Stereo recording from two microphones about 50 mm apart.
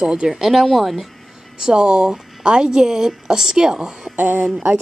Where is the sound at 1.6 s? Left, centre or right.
Centre.